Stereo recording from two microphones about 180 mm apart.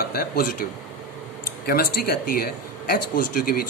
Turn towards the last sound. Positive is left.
turn(degrees=55)  # may be behind; listen again after turning